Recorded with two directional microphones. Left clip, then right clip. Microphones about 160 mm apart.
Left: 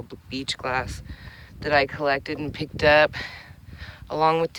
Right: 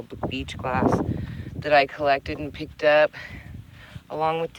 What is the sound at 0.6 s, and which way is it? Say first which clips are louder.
Speech: right 8 dB; 30° left (ahead or behind).